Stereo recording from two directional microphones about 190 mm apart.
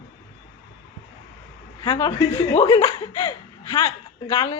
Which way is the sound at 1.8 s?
25° left (ahead or behind).